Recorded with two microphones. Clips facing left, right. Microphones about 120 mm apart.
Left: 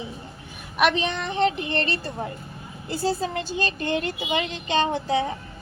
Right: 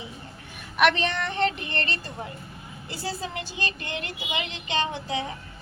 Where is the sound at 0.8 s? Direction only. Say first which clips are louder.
Even; 15° left (ahead or behind).